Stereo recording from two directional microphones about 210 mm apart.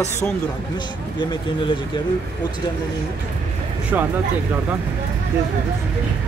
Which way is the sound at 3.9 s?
10° right (ahead or behind).